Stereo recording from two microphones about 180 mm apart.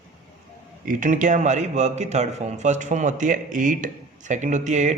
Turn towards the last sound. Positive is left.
turn(degrees=-40)  # may be behind; listen again after turning